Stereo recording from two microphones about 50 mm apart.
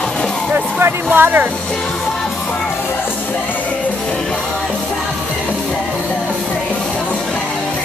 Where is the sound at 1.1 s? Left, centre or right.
Right.